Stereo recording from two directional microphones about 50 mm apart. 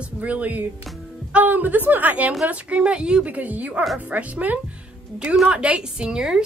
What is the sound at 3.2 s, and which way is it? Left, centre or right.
A woman's voice, right.